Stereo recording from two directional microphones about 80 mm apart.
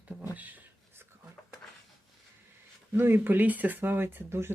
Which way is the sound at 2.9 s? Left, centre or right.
Right.